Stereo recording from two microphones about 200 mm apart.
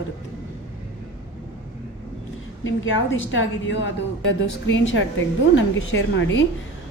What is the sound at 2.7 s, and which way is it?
A woman's voice, 75° left (ahead or behind).